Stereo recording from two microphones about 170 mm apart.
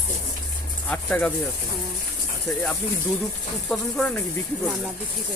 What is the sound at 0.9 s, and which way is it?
Speech, 10° left (ahead or behind).